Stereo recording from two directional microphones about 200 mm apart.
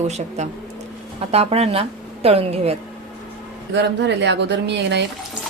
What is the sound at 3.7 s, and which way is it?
Speech, 60° right (ahead or behind).